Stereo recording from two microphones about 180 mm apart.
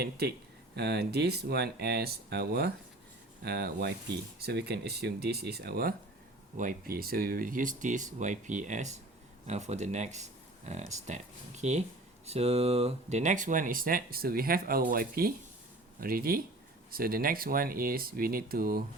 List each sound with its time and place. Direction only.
0.0 s speech: 60° right (ahead or behind)